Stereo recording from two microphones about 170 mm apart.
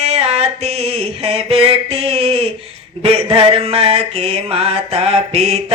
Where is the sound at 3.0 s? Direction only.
35° right (ahead or behind).